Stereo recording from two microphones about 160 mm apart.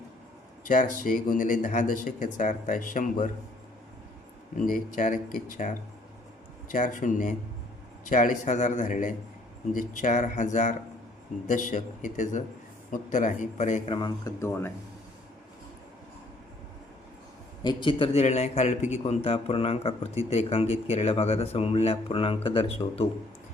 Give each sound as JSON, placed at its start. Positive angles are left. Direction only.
{"t": 1.0, "sound": "speech", "side_deg": 60}
{"t": 4.5, "sound": "speech", "side_deg": 60}
{"t": 13.9, "sound": "speech", "side_deg": 30}
{"t": 14.4, "sound": "speech", "side_deg": 15}
{"t": 17.6, "sound": "a man's voice", "side_deg": 30}